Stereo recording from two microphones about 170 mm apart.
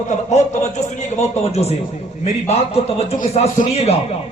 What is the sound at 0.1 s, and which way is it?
A man's voice, 45° left (ahead or behind).